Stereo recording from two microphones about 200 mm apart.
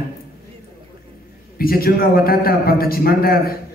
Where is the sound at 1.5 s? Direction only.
50° left (ahead or behind).